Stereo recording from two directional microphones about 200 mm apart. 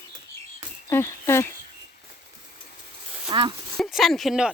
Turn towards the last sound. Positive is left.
turn(degrees=0)  # may be behind; listen again after turning